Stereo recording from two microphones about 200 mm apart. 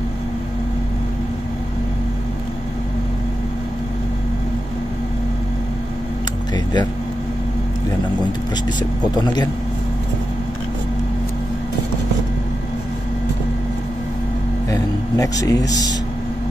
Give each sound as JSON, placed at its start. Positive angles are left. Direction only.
{"t": 6.5, "sound": "a sound", "side_deg": 20}
{"t": 8.6, "sound": "speech", "side_deg": 20}
{"t": 14.7, "sound": "music", "side_deg": 15}